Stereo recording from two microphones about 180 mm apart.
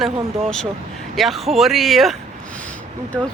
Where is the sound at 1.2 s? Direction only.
Centre (ahead or behind).